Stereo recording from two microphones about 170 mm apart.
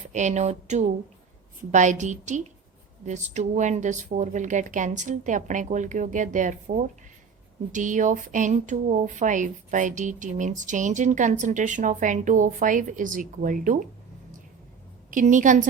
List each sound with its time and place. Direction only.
0.1 s speech: 45° right (ahead or behind)
7.7 s speech: 50° right (ahead or behind)
15.1 s speech: 50° right (ahead or behind)